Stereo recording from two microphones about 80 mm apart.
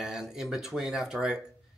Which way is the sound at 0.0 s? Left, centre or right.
Centre.